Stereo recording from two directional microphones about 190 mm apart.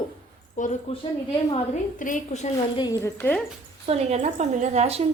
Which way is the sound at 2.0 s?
45° left (ahead or behind).